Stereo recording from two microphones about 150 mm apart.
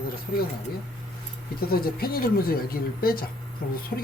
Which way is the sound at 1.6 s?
90° left.